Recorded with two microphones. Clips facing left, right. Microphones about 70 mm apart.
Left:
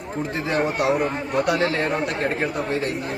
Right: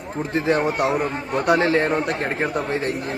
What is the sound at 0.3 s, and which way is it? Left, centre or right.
Speech, right.